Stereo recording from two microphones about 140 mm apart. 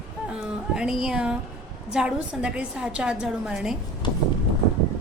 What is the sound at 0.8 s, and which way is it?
A woman's voice, 5° right (ahead or behind).